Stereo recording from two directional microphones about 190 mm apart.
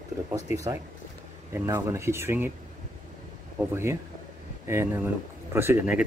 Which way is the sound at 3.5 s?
15° right (ahead or behind).